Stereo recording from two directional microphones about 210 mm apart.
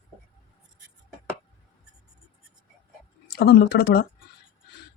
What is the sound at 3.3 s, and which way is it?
Speech, 50° left (ahead or behind).